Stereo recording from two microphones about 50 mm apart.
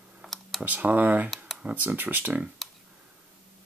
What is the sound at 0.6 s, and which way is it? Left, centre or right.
Speech, right.